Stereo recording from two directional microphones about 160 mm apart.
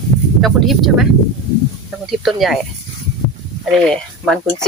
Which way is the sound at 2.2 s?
Centre (ahead or behind).